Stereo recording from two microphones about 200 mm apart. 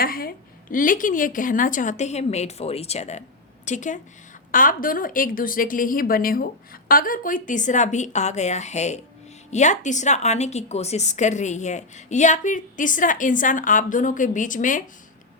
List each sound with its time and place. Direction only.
0.0 s a woman's voice: 45° left (ahead or behind)